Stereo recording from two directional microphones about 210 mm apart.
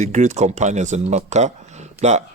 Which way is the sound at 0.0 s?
35° right (ahead or behind).